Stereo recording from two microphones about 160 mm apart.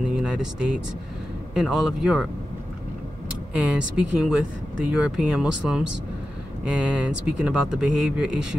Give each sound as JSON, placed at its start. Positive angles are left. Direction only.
{"t": 0.1, "sound": "speech", "side_deg": -5}
{"t": 3.5, "sound": "speech", "side_deg": -5}